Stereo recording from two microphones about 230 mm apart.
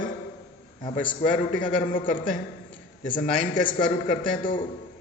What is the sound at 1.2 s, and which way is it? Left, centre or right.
A man's voice, left.